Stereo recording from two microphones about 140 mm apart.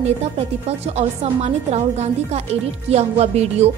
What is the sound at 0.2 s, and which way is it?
A woman's voice, 50° right (ahead or behind).